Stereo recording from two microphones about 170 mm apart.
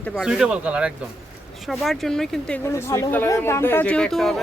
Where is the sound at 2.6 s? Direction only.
15° left (ahead or behind).